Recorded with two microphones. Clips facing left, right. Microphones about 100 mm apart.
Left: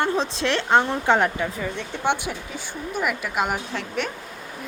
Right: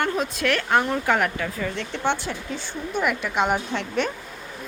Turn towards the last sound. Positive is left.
turn(degrees=0)  # may be behind; listen again after turning